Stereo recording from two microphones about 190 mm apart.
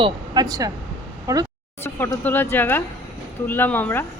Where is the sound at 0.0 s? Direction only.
20° right (ahead or behind).